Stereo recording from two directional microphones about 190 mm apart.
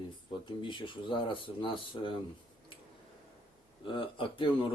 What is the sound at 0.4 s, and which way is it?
Speech, 25° left (ahead or behind).